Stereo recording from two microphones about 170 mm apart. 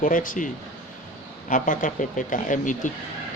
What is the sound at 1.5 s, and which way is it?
Speech, 50° left (ahead or behind).